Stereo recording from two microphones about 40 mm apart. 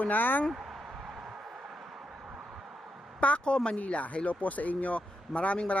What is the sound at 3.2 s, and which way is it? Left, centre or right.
Speech, left.